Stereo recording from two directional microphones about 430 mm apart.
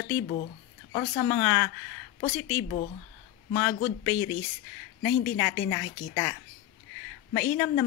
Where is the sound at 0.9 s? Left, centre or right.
Centre.